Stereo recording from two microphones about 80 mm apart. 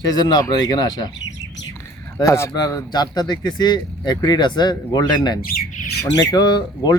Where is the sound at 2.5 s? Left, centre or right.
Left.